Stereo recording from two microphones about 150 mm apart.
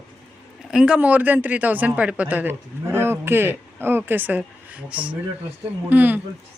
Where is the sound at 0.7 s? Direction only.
5° right (ahead or behind).